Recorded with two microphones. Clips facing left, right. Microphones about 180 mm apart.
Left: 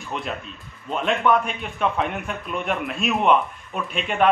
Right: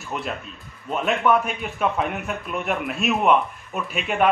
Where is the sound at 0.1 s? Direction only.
5° right (ahead or behind).